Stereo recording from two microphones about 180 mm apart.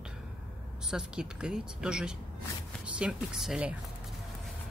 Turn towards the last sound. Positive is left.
turn(degrees=-5)  # may be behind; listen again after turning